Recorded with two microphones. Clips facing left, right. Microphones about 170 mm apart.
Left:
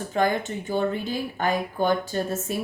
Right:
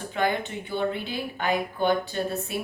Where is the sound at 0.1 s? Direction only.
40° left (ahead or behind).